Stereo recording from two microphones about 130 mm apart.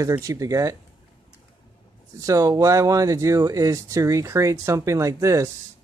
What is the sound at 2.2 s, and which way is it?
Speech, 25° right (ahead or behind).